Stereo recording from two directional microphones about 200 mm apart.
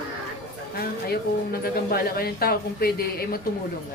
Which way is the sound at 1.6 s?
50° left (ahead or behind).